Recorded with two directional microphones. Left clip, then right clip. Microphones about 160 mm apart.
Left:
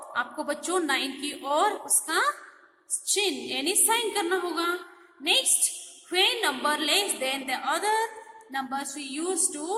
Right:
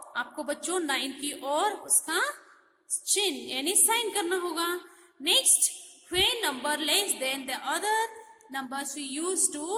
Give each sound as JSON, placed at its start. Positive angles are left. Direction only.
{"t": 0.1, "sound": "a woman's voice", "side_deg": -20}